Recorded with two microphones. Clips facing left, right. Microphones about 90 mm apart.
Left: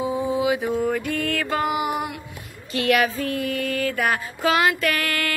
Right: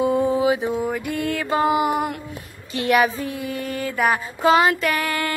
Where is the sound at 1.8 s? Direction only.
40° right (ahead or behind).